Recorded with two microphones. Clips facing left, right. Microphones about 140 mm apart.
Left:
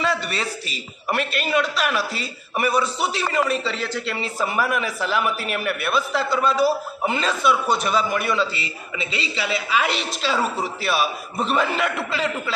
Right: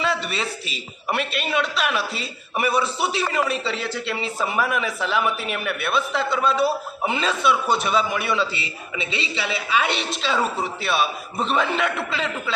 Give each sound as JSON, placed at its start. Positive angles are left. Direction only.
{"t": 0.0, "sound": "a man's voice", "side_deg": 0}